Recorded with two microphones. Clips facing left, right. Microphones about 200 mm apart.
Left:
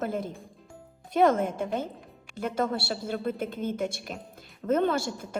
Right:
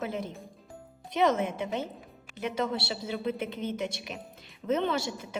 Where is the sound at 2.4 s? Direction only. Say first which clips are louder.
Left 2 dB; 50° left (ahead or behind).